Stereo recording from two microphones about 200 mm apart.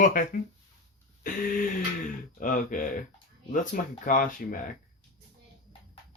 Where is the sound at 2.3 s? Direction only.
40° left (ahead or behind).